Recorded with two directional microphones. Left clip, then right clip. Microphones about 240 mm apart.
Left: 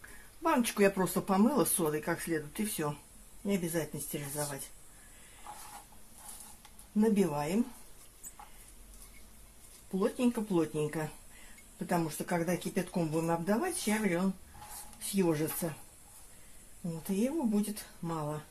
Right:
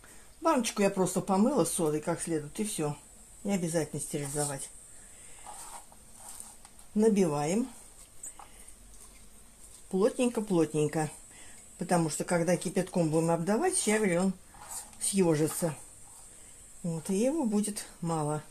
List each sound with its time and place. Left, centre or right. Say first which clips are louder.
0.4 s speech: right 1 dB; right
7.0 s speech: right 4 dB; right
9.9 s speech: right 4 dB; right
17.2 s speech: right 3 dB; right